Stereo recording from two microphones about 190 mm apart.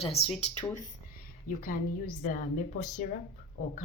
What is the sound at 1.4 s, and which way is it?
Speech, 45° left (ahead or behind).